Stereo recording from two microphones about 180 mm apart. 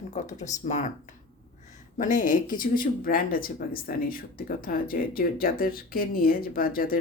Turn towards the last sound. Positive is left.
turn(degrees=50)  # may be behind; listen again after turning